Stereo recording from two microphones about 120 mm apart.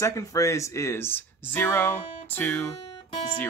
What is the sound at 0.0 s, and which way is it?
Speech, 25° left (ahead or behind).